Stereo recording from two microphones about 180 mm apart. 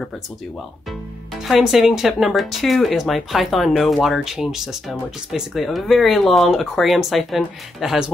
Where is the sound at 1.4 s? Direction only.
Centre (ahead or behind).